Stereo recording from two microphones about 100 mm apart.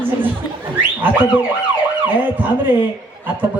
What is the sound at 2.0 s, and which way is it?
Speech, 20° right (ahead or behind).